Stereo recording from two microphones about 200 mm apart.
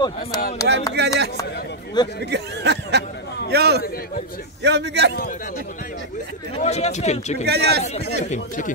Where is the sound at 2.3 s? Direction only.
55° right (ahead or behind).